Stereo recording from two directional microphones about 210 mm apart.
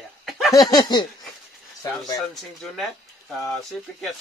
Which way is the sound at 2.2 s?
Centre (ahead or behind).